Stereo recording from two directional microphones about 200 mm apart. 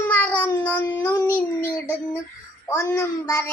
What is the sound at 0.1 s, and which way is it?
Child singing, 10° left (ahead or behind).